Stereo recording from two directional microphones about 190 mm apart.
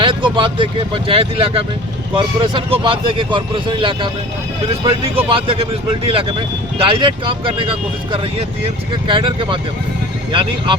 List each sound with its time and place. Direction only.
0.0 s speech: 25° right (ahead or behind)